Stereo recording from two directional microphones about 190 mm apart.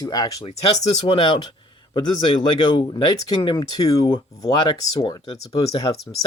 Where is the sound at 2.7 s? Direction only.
25° left (ahead or behind).